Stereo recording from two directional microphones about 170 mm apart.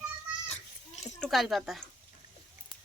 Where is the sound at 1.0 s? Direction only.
Centre (ahead or behind).